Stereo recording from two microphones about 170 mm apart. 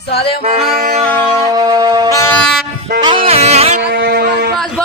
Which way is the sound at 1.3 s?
20° right (ahead or behind).